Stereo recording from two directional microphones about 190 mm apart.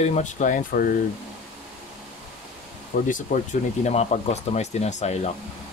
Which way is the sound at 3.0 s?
45° left (ahead or behind).